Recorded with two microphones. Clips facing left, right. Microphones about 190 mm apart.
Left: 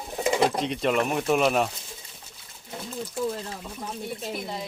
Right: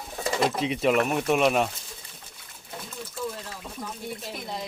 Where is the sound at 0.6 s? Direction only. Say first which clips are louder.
Right 1 dB; 5° right (ahead or behind).